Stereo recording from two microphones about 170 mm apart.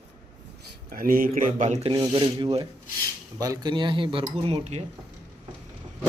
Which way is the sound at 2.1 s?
25° right (ahead or behind).